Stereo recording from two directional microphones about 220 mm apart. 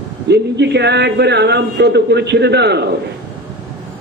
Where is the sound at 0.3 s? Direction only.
50° right (ahead or behind).